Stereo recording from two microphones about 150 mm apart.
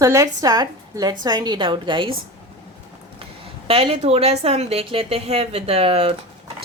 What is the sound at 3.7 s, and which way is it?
Speech, 35° right (ahead or behind).